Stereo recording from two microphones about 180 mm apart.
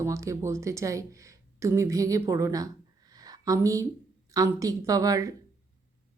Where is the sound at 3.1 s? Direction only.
20° right (ahead or behind).